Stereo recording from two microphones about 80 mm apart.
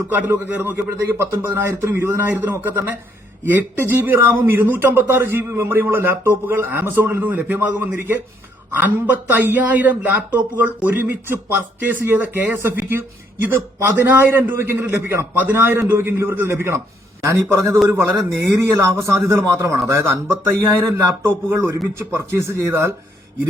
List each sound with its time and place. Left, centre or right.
0.1 s a man's voice: right